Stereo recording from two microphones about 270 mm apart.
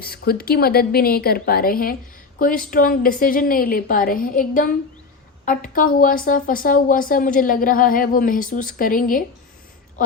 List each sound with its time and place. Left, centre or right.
0.0 s speech: left